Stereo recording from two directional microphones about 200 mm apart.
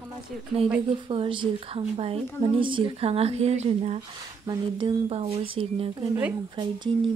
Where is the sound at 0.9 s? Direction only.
25° right (ahead or behind).